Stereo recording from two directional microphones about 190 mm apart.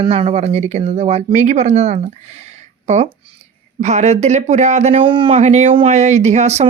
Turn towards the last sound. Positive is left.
turn(degrees=-35)  # may be behind; listen again after turning